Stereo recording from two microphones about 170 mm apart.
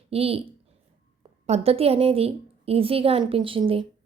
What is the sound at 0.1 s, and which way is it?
Speech, 35° right (ahead or behind).